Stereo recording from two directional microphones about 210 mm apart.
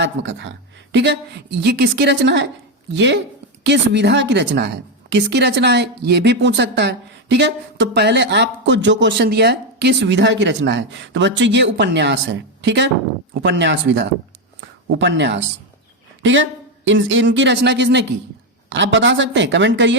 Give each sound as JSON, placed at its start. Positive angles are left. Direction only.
{"t": 0.0, "sound": "a woman's voice", "side_deg": -55}